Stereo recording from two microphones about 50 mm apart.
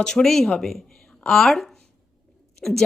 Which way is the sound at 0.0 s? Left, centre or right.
Centre.